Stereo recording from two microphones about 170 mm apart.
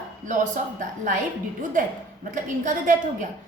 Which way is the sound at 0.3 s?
50° right (ahead or behind).